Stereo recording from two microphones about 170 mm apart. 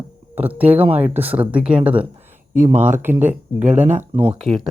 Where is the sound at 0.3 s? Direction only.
10° right (ahead or behind).